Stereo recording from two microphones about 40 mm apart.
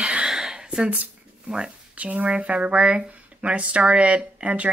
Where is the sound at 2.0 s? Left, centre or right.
Right.